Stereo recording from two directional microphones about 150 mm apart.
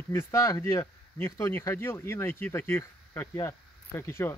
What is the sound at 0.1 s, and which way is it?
Speech, 20° left (ahead or behind).